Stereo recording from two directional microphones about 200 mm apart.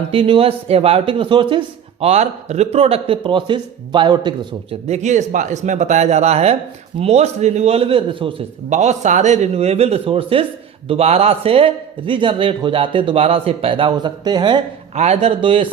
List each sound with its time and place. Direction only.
0.1 s speech: 25° right (ahead or behind)
4.9 s a man's voice: 35° right (ahead or behind)
14.9 s a man's voice: 35° right (ahead or behind)